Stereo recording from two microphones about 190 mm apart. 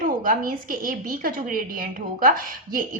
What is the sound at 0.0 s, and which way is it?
A woman's voice, 45° right (ahead or behind).